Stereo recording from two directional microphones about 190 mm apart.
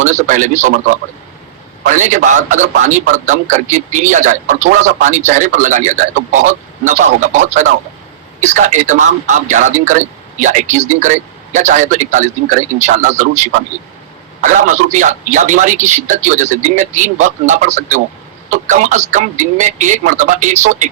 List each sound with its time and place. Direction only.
0.0 s a man's voice: 40° right (ahead or behind)